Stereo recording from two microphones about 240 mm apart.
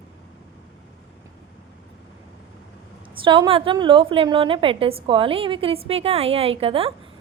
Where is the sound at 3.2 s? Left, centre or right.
Right.